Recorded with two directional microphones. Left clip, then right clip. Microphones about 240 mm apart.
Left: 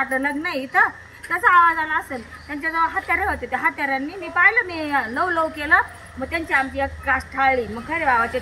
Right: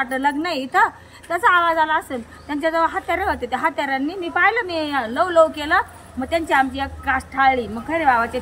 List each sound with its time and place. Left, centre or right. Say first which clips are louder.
0.0 s a woman's voice: right 2 dB; centre